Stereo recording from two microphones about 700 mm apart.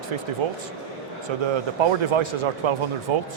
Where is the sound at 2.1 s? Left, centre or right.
Right.